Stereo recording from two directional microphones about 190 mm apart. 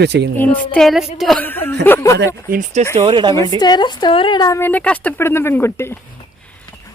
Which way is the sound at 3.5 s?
20° left (ahead or behind).